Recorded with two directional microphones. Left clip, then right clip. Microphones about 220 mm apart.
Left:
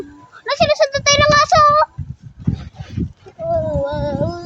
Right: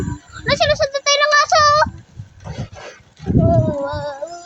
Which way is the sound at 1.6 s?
10° left (ahead or behind).